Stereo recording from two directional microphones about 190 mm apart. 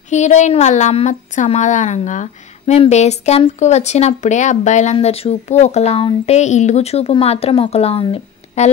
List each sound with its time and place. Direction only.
0.1 s a woman's voice: 40° left (ahead or behind)